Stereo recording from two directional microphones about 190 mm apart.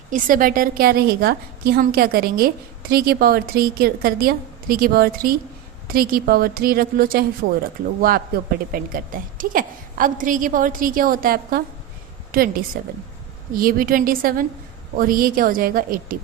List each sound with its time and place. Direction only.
0.1 s a woman's voice: 45° right (ahead or behind)